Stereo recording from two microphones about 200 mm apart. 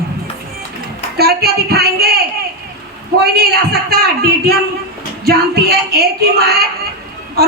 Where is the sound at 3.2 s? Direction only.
50° right (ahead or behind).